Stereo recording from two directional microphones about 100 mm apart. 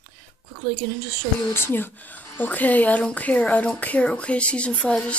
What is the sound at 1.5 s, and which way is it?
Speech, 20° left (ahead or behind).